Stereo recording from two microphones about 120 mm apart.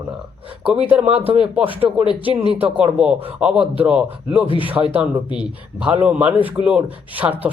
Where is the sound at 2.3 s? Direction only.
55° right (ahead or behind).